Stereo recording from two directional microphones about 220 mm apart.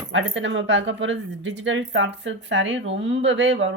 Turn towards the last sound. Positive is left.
turn(degrees=-55)  # may be behind; listen again after turning